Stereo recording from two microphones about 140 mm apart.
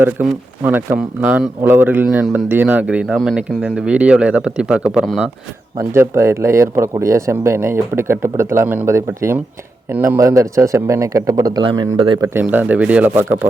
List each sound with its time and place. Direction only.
0.0 s a man's voice: 15° right (ahead or behind)
5.9 s speech: 20° right (ahead or behind); by 12.2 s 35° right (ahead or behind)
12.2 s a man's voice: 15° right (ahead or behind)